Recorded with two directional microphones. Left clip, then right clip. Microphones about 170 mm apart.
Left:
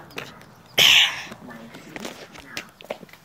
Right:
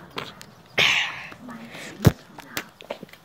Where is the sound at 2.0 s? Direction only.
75° right (ahead or behind).